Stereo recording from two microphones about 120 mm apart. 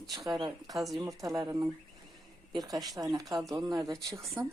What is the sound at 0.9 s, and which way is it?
Speech, 30° right (ahead or behind).